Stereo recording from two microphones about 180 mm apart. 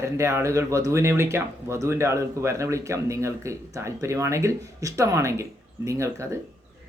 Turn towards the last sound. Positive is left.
turn(degrees=-15)  # may be behind; listen again after turning